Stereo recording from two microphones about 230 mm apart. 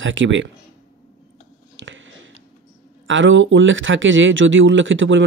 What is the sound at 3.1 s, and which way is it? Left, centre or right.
Speech, right.